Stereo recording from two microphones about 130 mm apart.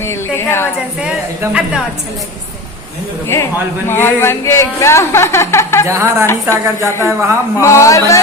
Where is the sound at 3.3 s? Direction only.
20° left (ahead or behind).